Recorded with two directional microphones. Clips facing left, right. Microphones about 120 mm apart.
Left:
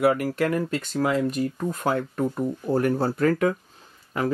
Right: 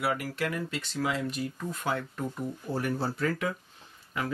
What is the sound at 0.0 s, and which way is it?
Speech, 50° left (ahead or behind).